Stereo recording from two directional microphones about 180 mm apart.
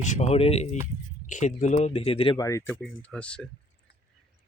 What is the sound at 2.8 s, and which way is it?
Speech, 5° left (ahead or behind).